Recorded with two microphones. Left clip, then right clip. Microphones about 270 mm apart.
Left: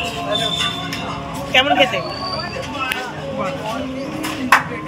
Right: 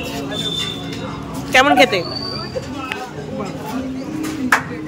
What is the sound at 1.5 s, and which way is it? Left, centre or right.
Speech, centre.